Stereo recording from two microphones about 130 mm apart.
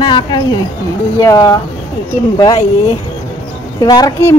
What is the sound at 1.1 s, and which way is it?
Speech, 25° left (ahead or behind).